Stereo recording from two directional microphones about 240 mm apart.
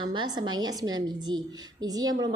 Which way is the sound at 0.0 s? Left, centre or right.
Centre.